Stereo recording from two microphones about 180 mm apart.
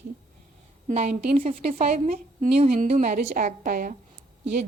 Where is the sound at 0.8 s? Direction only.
35° right (ahead or behind).